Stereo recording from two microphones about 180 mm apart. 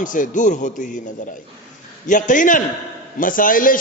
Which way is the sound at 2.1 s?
45° left (ahead or behind).